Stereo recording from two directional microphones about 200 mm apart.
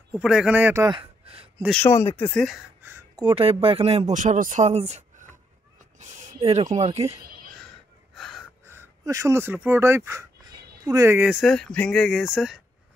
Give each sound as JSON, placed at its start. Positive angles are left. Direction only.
{"t": 0.1, "sound": "a man's voice", "side_deg": -5}
{"t": 0.8, "sound": "a sound", "side_deg": -25}
{"t": 1.8, "sound": "speech", "side_deg": 10}
{"t": 2.3, "sound": "a man's voice", "side_deg": 0}
{"t": 2.8, "sound": "a sound", "side_deg": -15}
{"t": 3.3, "sound": "speech", "side_deg": -25}
{"t": 5.9, "sound": "a sound", "side_deg": -35}
{"t": 6.7, "sound": "speech", "side_deg": -35}
{"t": 8.2, "sound": "gasp", "side_deg": 0}
{"t": 8.6, "sound": "speech", "side_deg": -15}